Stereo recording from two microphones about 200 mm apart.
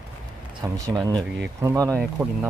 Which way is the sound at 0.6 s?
20° right (ahead or behind).